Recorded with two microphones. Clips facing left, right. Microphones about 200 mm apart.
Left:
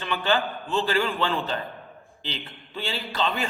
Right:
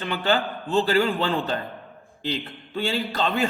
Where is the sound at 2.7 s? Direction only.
50° right (ahead or behind).